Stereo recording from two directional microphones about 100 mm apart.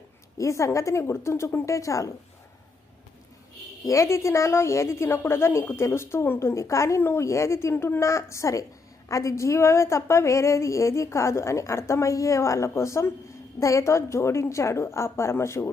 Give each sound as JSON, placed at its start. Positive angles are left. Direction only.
{"t": 0.3, "sound": "a woman's voice", "side_deg": 30}
{"t": 3.8, "sound": "a woman's voice", "side_deg": 30}